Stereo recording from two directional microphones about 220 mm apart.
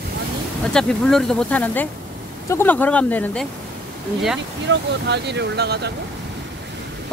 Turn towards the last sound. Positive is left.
turn(degrees=-50)  # may be behind; listen again after turning